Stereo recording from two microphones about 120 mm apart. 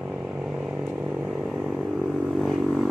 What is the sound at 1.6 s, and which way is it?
Vehicle, centre (ahead or behind).